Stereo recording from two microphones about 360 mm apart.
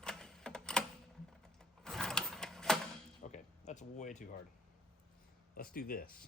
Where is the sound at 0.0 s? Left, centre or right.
Centre.